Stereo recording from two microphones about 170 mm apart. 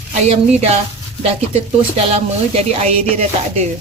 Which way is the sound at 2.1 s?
40° right (ahead or behind).